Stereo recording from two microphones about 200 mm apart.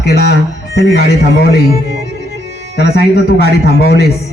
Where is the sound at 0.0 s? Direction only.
55° left (ahead or behind).